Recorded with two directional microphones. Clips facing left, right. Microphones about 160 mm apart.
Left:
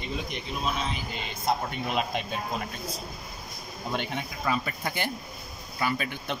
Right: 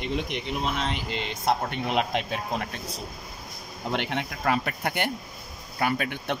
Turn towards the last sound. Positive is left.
turn(degrees=-60)  # may be behind; listen again after turning